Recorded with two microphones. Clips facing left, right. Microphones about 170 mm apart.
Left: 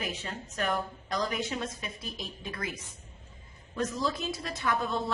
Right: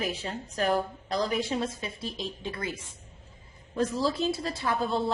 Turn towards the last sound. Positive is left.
turn(degrees=-30)  # may be behind; listen again after turning